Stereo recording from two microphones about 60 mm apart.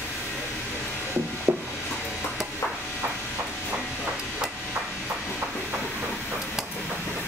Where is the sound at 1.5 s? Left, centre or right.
Right.